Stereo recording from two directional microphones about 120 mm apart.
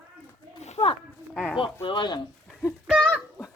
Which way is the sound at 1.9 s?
40° left (ahead or behind).